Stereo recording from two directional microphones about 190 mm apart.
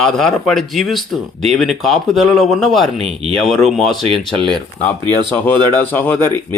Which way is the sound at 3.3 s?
Centre (ahead or behind).